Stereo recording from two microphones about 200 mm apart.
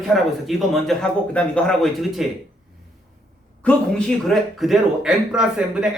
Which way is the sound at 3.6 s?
5° left (ahead or behind).